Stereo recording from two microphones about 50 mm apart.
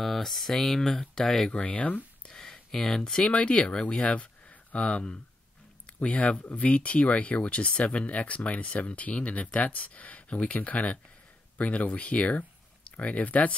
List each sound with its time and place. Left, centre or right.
0.0 s speech: centre
1.5 s speech: left
2.2 s a sound: centre
3.3 s speech: left